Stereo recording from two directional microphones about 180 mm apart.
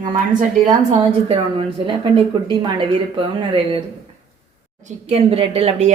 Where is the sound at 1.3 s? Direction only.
30° right (ahead or behind).